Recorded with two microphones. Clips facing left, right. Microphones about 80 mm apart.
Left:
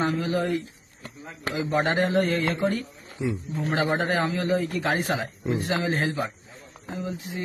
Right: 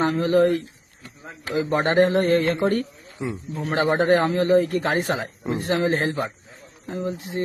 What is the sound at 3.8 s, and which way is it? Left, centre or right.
Speech, right.